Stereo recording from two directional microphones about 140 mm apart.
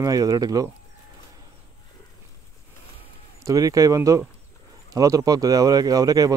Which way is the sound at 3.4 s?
25° right (ahead or behind).